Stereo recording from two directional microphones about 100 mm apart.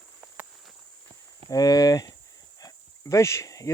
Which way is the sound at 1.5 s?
40° left (ahead or behind).